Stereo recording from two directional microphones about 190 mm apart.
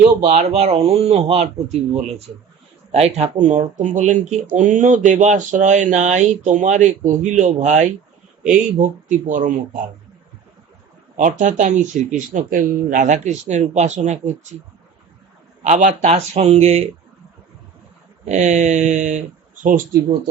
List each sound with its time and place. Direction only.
0.0 s speech: 35° right (ahead or behind)
11.2 s speech: 40° right (ahead or behind)
15.6 s speech: 40° right (ahead or behind)
18.3 s speech: 40° right (ahead or behind)